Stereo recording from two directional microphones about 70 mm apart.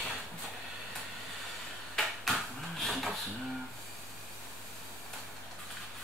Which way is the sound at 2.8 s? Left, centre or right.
Centre.